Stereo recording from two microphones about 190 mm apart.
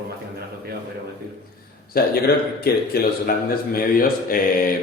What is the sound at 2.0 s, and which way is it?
A man's voice, 55° left (ahead or behind).